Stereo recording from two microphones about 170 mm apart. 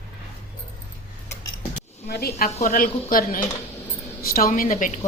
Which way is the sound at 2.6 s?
50° left (ahead or behind).